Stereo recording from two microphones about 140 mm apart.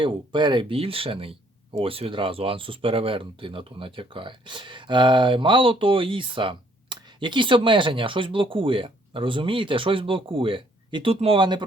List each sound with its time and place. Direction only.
0.0 s speech: 35° right (ahead or behind)